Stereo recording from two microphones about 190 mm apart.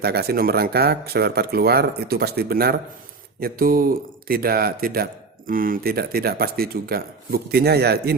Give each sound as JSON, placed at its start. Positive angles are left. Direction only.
{"t": 0.0, "sound": "speech", "side_deg": -55}